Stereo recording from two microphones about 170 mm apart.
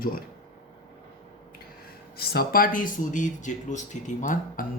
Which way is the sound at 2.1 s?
65° left (ahead or behind).